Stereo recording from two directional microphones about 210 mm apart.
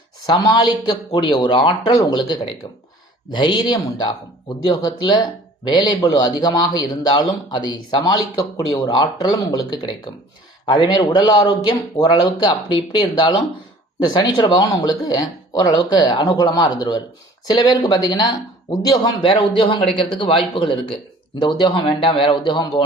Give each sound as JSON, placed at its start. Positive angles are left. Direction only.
{"t": 0.3, "sound": "speech", "side_deg": 20}